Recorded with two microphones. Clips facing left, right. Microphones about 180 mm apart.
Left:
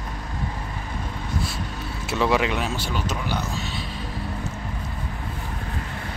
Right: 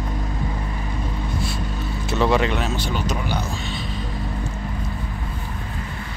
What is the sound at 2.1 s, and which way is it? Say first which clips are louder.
Speech: right 2 dB; 5° left (ahead or behind).